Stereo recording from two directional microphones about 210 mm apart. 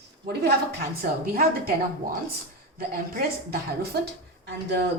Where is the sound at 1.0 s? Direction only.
45° right (ahead or behind).